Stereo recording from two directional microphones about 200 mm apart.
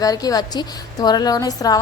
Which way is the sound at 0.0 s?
20° left (ahead or behind).